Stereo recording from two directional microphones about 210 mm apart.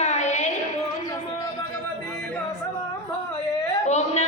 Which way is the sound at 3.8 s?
30° left (ahead or behind).